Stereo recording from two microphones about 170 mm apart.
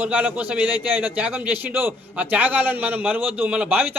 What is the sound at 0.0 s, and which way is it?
A man's voice, 10° right (ahead or behind).